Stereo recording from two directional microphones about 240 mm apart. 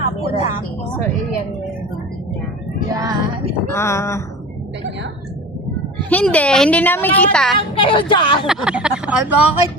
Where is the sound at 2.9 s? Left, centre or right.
Centre.